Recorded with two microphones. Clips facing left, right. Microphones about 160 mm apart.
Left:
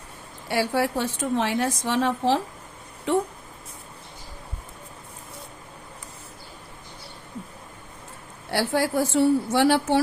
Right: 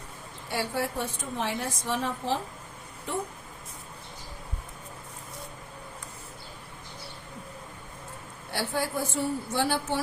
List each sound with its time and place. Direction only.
0.4 s a woman's voice: 80° left
8.4 s a woman's voice: 80° left